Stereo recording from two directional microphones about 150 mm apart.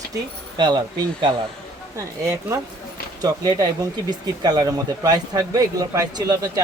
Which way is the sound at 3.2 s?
25° right (ahead or behind).